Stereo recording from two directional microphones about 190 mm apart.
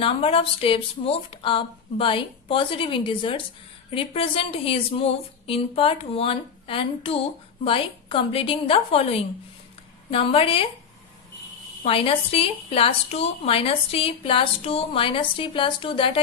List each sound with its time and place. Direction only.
0.0 s a woman's voice: 30° left (ahead or behind)
11.9 s a woman's voice: 30° left (ahead or behind)